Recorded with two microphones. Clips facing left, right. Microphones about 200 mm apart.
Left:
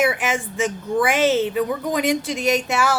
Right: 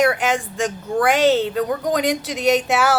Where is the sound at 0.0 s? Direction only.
5° left (ahead or behind).